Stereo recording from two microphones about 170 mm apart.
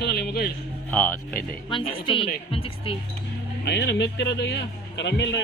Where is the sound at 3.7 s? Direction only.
85° left.